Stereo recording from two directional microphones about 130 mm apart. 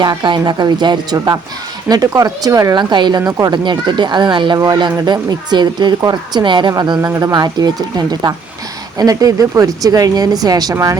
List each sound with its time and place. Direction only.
0.0 s a woman's voice: 30° right (ahead or behind)
4.5 s a woman's voice: 30° right (ahead or behind)
7.0 s a woman's voice: 25° right (ahead or behind)